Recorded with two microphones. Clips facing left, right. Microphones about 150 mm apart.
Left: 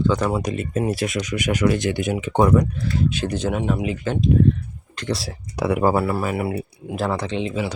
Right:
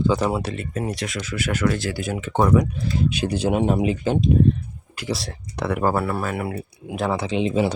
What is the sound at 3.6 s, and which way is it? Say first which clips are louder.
Speech: right 3 dB; 30° right (ahead or behind).